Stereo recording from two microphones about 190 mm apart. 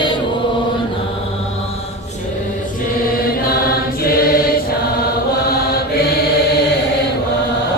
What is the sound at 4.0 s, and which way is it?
Choir, 50° left (ahead or behind).